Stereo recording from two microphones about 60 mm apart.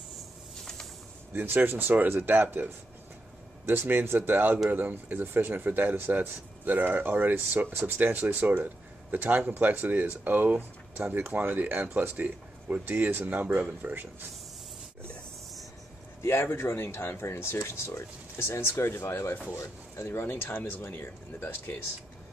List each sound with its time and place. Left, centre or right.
0.6 s a sound: centre
1.3 s speech: right
3.6 s speech: right
16.2 s speech: left
20.1 s speech: left